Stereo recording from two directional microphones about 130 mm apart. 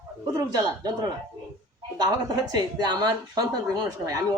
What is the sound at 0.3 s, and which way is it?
Speech, 30° right (ahead or behind).